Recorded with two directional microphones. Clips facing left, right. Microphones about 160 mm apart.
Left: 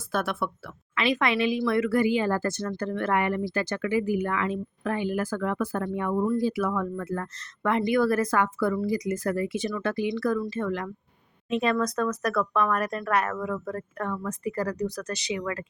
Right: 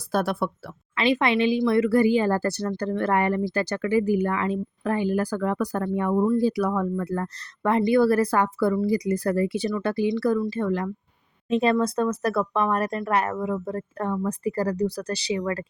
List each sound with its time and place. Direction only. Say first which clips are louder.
0.1 s speech: right 4 dB; 35° right (ahead or behind)